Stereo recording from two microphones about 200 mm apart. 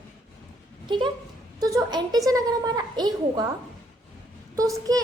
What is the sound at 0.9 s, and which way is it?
A woman's voice, 25° right (ahead or behind).